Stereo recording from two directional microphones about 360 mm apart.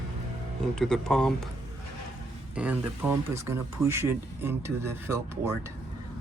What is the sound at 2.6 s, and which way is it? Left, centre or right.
Speech, centre.